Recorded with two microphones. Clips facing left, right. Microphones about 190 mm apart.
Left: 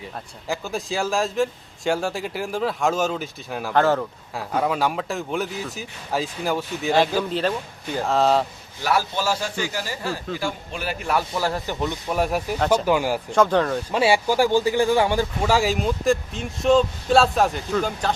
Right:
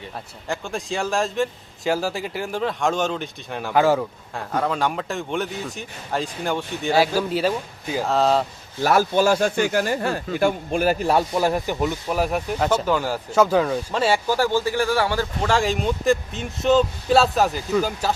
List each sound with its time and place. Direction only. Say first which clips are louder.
0.4 s speech: left 1 dB; centre (ahead or behind)
4.4 s speech: left 1 dB; 5° left (ahead or behind)
8.8 s a man's voice: right 5 dB; 50° right (ahead or behind)
11.0 s speech: right 4 dB; 25° right (ahead or behind); by 12.8 s 5° right (ahead or behind)
12.8 s speech: left 2 dB; 10° left (ahead or behind)
13.3 s speech: right 1 dB; 5° right (ahead or behind)
13.9 s speech: left 3 dB; 10° left (ahead or behind); by 18.1 s 5° right (ahead or behind)